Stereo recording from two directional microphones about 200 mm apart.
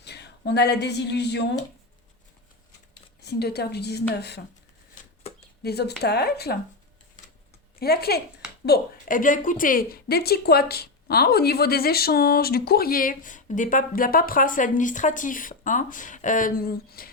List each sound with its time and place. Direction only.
0.0 s a woman's voice: 55° left (ahead or behind)
2.9 s a woman's voice: 55° left (ahead or behind)
5.6 s a woman's voice: 55° left (ahead or behind)
7.8 s a woman's voice: 50° left (ahead or behind)